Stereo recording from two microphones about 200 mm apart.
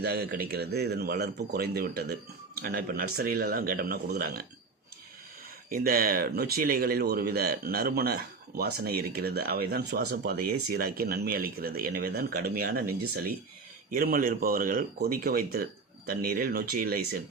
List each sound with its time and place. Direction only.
0.0 s speech: 50° right (ahead or behind)
5.6 s speech: 45° right (ahead or behind)